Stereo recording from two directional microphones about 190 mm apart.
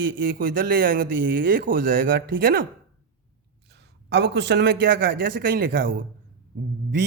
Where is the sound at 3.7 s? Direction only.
60° right (ahead or behind).